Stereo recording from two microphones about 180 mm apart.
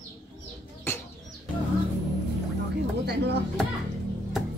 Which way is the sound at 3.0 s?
65° right (ahead or behind).